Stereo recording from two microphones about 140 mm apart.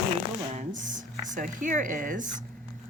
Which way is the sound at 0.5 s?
65° right (ahead or behind).